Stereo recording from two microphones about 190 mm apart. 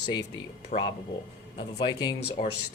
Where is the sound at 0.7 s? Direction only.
40° left (ahead or behind).